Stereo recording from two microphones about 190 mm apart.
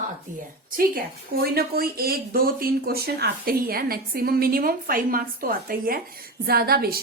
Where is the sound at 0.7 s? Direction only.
50° right (ahead or behind).